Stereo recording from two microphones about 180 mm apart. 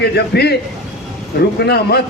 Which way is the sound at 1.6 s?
65° left (ahead or behind).